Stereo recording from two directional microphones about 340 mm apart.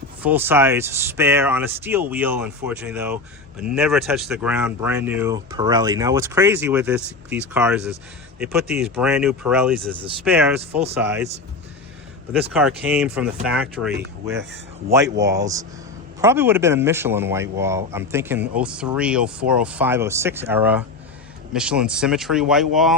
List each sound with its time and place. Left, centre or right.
0.2 s speech: centre
10.7 s speech: centre
12.5 s speech: centre